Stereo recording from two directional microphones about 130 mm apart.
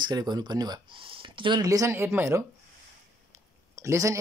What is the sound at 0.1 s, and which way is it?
Speech, 30° right (ahead or behind).